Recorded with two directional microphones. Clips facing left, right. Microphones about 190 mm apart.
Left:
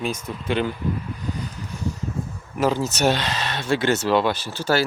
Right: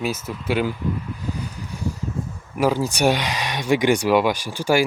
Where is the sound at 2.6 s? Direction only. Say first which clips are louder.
Right 1 dB; 10° right (ahead or behind).